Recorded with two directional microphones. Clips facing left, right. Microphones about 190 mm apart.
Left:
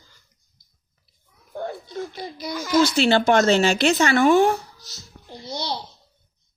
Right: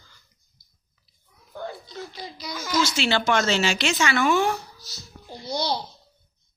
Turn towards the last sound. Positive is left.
turn(degrees=25)  # may be behind; listen again after turning